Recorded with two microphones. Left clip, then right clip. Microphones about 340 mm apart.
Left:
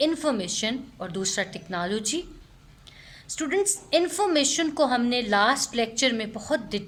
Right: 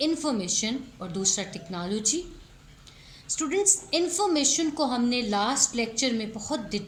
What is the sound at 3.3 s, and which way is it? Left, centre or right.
A woman's voice, left.